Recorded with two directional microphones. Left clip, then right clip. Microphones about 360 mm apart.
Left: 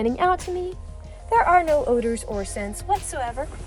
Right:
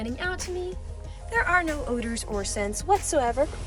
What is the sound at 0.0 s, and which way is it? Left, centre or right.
Speech, centre.